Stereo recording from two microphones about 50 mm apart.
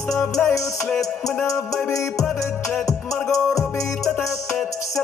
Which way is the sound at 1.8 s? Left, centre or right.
Left.